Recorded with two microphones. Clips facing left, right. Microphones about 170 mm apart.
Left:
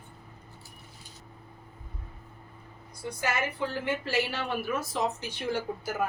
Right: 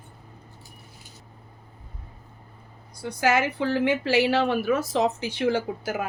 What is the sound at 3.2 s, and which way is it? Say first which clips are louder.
A woman's voice: right 8 dB; 90° right.